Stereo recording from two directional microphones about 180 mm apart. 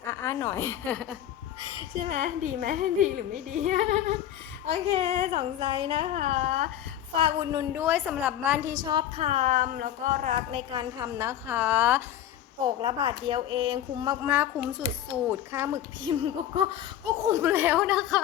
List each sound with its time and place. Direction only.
0.0 s speech: 15° left (ahead or behind)
2.0 s speech: 40° right (ahead or behind)
7.6 s a child's voice: 10° right (ahead or behind)
8.8 s speech: 25° right (ahead or behind); by 12.0 s 10° right (ahead or behind)
12.6 s speech: 25° right (ahead or behind)
14.3 s a child's voice: 10° right (ahead or behind)
16.1 s speech: 30° right (ahead or behind)
17.2 s a child's voice: 15° right (ahead or behind)